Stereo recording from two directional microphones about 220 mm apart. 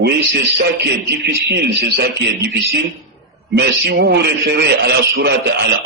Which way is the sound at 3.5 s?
50° right (ahead or behind).